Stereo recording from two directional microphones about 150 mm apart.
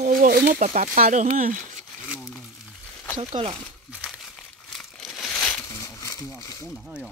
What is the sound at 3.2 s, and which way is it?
Speech, 40° right (ahead or behind).